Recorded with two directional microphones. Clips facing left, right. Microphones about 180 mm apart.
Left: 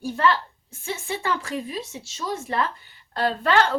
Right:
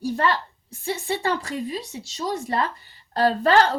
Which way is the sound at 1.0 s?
35° right (ahead or behind).